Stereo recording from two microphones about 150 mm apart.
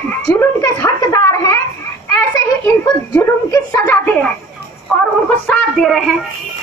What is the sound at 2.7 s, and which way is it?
A child's voice, 20° left (ahead or behind).